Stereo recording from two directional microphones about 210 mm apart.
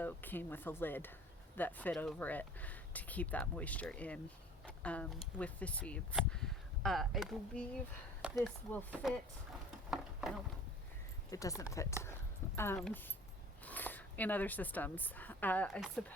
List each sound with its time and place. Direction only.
0.0 s speech: 10° left (ahead or behind)
9.9 s a sound: centre (ahead or behind)
11.3 s speech: 15° left (ahead or behind)